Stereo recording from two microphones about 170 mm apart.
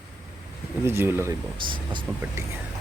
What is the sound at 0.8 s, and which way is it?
Speech, 15° right (ahead or behind).